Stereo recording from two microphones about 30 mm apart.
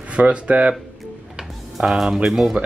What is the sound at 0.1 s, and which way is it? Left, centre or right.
Speech, right.